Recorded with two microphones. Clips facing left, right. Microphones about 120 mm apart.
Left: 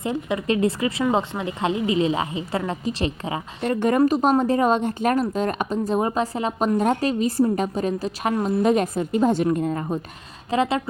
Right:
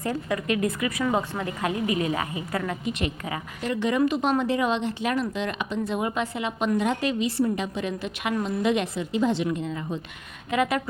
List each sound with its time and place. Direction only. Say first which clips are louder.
0.0 s a woman's voice: left 3 dB; 20° left (ahead or behind)
3.7 s a woman's voice: left 5 dB; 50° left (ahead or behind)
10.5 s a woman's voice: left 3 dB; 30° left (ahead or behind)